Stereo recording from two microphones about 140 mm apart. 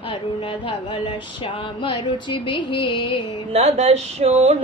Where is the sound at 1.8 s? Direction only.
35° left (ahead or behind).